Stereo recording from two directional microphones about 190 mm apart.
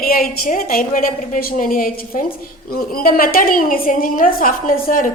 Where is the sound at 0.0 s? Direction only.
50° left (ahead or behind).